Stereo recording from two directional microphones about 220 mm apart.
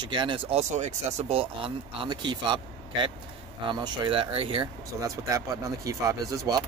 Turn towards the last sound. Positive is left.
turn(degrees=-15)  # may be behind; listen again after turning